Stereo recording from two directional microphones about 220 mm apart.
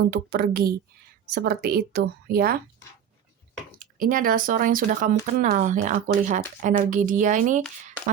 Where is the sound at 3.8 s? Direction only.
40° right (ahead or behind).